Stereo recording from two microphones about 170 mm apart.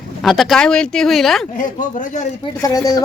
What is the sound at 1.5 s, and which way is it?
Speech, 50° left (ahead or behind).